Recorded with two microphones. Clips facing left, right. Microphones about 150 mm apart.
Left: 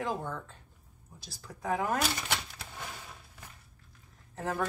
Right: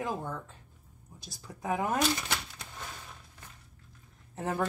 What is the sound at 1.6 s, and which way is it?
Speech, 20° right (ahead or behind).